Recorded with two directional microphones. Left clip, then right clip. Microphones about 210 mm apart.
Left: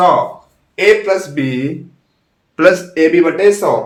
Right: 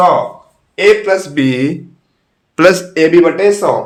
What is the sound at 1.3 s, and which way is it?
A man's voice, 55° right (ahead or behind).